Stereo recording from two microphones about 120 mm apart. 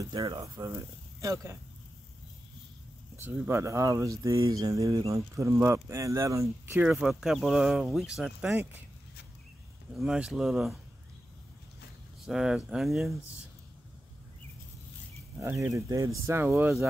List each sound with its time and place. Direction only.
0.0 s speech: 35° right (ahead or behind)
3.2 s speech: 20° right (ahead or behind)
6.8 s speech: 5° right (ahead or behind)
8.5 s speech: 15° right (ahead or behind)
9.9 s speech: 5° right (ahead or behind)
12.3 s speech: 5° right (ahead or behind)
15.4 s speech: 25° right (ahead or behind)